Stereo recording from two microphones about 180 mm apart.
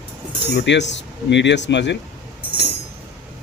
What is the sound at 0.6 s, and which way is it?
Speech, 80° left.